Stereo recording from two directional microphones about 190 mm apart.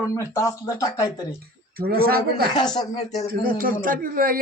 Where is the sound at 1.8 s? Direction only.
50° right (ahead or behind).